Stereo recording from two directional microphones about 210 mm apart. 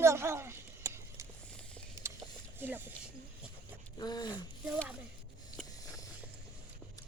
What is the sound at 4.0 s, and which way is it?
Speech, 20° left (ahead or behind).